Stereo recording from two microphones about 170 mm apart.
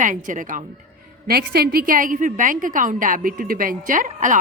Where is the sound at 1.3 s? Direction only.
65° right (ahead or behind).